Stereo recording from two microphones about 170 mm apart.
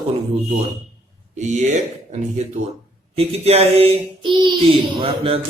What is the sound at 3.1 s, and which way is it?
Speech, 35° right (ahead or behind).